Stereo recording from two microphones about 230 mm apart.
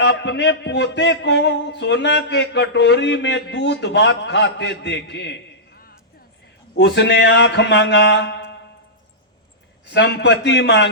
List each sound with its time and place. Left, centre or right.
0.0 s a man's voice: left
9.8 s a man's voice: left